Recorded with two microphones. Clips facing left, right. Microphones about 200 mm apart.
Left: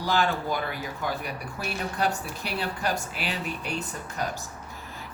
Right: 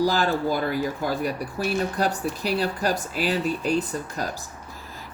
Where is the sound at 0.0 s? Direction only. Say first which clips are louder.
Right 4 dB; 35° right (ahead or behind).